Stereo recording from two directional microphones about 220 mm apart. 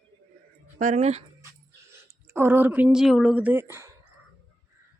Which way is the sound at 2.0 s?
10° right (ahead or behind).